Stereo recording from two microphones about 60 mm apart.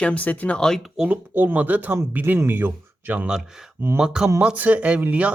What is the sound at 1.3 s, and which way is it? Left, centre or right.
Speech, right.